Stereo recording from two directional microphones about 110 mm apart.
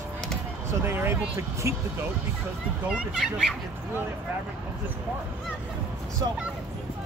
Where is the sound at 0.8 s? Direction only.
20° right (ahead or behind).